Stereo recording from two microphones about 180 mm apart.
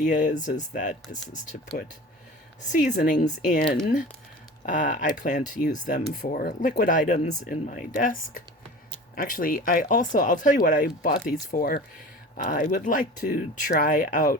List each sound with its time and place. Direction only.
0.0 s speech: 45° left (ahead or behind)
2.6 s speech: 45° left (ahead or behind)